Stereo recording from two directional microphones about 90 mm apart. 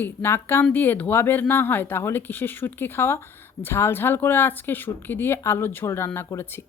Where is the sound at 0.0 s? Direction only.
25° left (ahead or behind).